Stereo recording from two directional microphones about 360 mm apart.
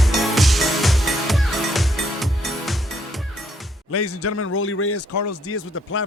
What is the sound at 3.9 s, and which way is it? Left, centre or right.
A man's voice, left.